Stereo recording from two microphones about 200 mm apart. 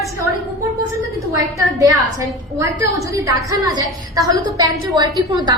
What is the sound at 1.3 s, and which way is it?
A woman's voice, 15° right (ahead or behind).